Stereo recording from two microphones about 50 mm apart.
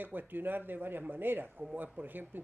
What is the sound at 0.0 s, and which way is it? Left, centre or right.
Speech, right.